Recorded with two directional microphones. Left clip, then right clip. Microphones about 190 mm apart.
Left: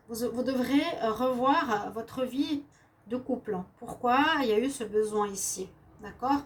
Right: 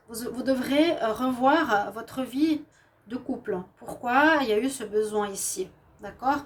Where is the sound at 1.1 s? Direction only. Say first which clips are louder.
Right 3 dB; 50° right (ahead or behind).